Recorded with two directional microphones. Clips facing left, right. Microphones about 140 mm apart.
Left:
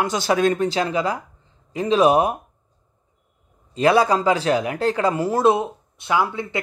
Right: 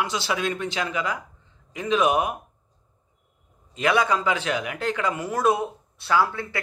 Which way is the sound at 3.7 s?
35° left (ahead or behind).